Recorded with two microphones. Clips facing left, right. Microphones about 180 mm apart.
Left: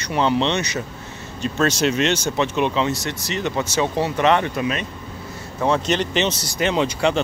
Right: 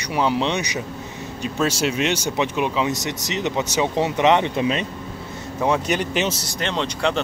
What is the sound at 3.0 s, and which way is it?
Speech, 20° right (ahead or behind).